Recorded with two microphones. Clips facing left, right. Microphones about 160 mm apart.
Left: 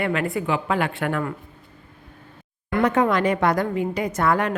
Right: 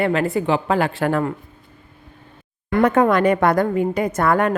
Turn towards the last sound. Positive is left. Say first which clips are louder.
# right 3 dB
turn(degrees=-50)  # may be behind; listen again after turning